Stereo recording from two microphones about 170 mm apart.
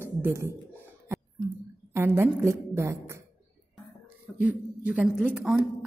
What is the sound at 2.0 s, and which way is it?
A woman's voice, 15° right (ahead or behind).